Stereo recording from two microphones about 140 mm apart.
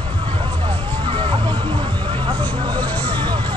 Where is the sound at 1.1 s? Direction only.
35° right (ahead or behind).